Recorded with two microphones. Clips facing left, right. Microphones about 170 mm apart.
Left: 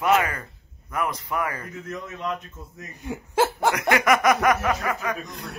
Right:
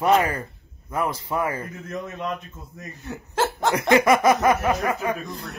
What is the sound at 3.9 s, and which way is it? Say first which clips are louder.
Speech: right 4 dB; 30° right (ahead or behind).